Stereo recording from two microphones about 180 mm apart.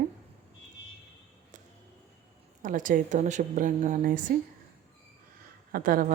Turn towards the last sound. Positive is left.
turn(degrees=-50)  # may be behind; listen again after turning